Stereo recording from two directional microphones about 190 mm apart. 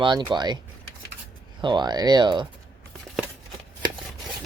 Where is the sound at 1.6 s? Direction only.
25° right (ahead or behind).